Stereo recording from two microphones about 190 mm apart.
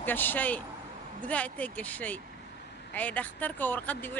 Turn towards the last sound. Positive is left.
turn(degrees=10)  # may be behind; listen again after turning